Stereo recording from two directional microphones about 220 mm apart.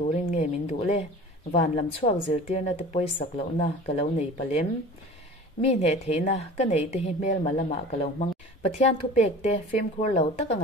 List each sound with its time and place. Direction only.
0.0 s a woman's voice: 30° left (ahead or behind)